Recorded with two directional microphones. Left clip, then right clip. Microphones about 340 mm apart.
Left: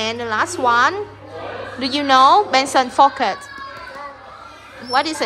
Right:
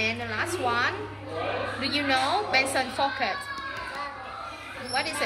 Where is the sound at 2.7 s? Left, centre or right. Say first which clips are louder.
Left 13 dB; left.